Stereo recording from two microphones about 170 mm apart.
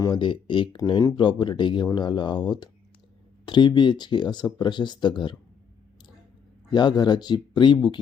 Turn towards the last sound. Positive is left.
turn(degrees=25)  # may be behind; listen again after turning